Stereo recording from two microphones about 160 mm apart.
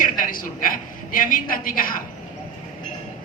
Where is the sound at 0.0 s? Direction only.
60° left (ahead or behind).